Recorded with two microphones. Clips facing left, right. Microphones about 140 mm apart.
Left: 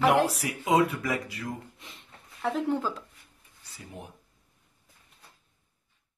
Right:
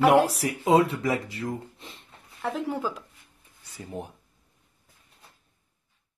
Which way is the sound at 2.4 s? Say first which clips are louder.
Left 1 dB; centre (ahead or behind).